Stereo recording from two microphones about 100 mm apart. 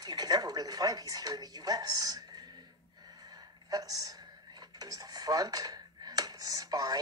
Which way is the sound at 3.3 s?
40° right (ahead or behind).